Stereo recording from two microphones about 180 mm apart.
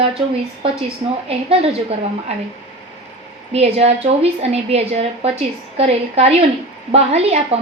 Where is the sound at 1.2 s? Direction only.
35° right (ahead or behind).